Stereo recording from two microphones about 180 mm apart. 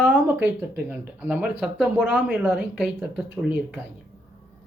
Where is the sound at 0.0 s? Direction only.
10° right (ahead or behind).